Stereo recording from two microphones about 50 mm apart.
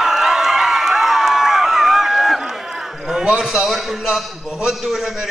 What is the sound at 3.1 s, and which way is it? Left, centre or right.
A man's voice, centre.